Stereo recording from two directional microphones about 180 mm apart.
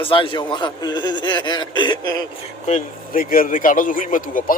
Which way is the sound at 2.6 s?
45° left (ahead or behind).